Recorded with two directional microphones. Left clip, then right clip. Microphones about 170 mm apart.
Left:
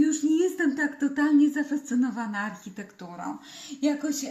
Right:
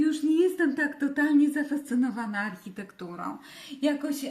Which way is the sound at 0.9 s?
20° right (ahead or behind).